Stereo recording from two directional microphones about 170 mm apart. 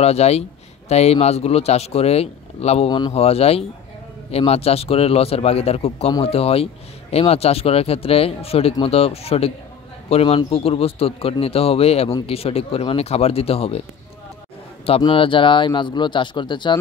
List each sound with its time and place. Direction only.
0.0 s a man's voice: 40° left (ahead or behind)
14.9 s speech: 30° left (ahead or behind)